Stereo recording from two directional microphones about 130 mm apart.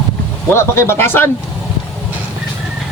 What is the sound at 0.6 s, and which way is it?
Speech, 20° left (ahead or behind).